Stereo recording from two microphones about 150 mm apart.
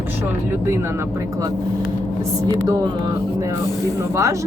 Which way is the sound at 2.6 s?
25° right (ahead or behind).